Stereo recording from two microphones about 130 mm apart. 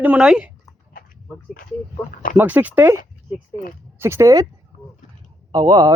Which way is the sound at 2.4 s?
10° right (ahead or behind).